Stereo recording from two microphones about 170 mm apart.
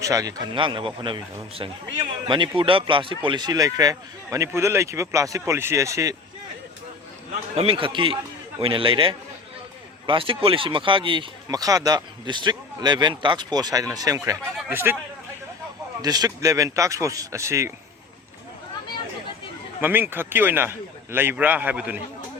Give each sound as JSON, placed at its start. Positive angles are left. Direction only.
{"t": 0.0, "sound": "a man's voice", "side_deg": -20}
{"t": 7.5, "sound": "a man's voice", "side_deg": -35}
{"t": 16.0, "sound": "a man's voice", "side_deg": -25}
{"t": 19.8, "sound": "a man's voice", "side_deg": -10}